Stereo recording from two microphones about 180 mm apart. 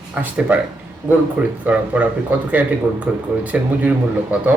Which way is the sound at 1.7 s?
10° right (ahead or behind).